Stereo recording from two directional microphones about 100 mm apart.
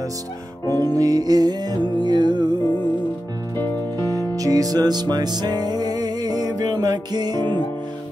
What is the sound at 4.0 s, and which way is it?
Music, 35° right (ahead or behind).